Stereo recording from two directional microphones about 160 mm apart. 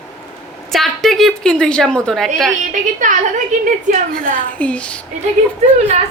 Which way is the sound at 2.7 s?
50° right (ahead or behind).